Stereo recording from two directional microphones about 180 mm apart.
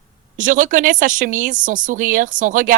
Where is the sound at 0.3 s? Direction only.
45° right (ahead or behind).